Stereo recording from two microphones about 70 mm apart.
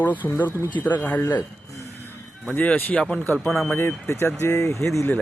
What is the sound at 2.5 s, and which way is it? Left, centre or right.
Speech, left.